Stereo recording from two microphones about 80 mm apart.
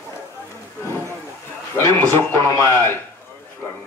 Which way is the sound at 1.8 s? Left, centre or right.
Left.